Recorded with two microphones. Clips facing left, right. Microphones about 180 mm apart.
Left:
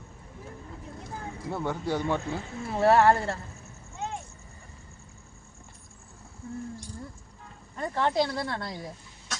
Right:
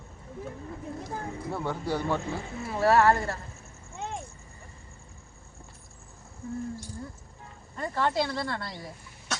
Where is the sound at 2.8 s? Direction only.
25° left (ahead or behind).